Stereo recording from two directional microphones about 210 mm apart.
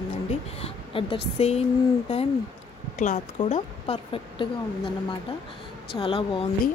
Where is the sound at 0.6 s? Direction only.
25° left (ahead or behind).